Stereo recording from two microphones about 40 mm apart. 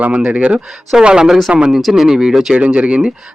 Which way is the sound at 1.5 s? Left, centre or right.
Right.